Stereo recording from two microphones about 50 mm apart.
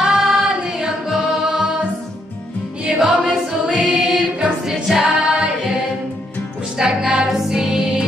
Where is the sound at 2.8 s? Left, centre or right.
Centre.